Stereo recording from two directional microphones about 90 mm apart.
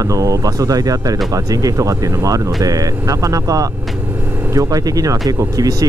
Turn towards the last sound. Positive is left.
turn(degrees=-40)  # may be behind; listen again after turning